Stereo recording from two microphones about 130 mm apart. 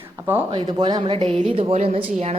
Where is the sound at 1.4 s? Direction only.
50° right (ahead or behind).